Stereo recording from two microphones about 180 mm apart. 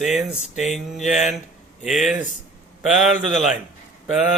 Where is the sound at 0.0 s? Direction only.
Centre (ahead or behind).